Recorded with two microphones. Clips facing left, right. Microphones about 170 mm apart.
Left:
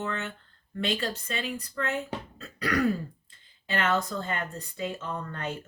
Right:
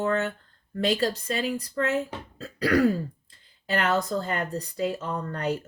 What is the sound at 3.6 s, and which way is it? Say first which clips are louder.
Speech: right 3 dB; 40° right (ahead or behind).